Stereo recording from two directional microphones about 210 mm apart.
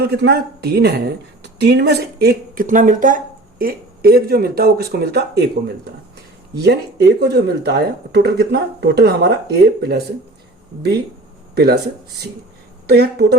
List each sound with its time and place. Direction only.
0.0 s speech: 50° right (ahead or behind)
11.5 s speech: 50° right (ahead or behind)
12.9 s speech: 50° right (ahead or behind)